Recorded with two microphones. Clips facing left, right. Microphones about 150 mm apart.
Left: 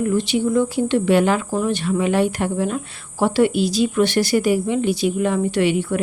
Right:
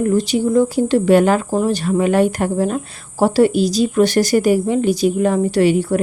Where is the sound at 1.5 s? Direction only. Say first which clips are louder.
Right 3 dB; 35° right (ahead or behind).